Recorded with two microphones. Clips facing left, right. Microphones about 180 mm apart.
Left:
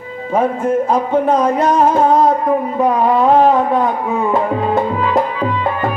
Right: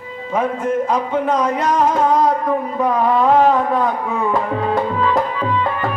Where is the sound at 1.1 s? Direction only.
30° left (ahead or behind).